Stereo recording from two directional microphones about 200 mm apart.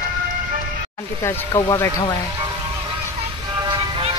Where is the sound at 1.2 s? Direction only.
15° left (ahead or behind).